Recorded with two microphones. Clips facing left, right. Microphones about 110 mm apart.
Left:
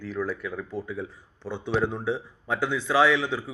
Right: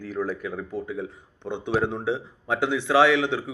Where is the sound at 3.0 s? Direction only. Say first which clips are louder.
Right 2 dB; 70° right (ahead or behind).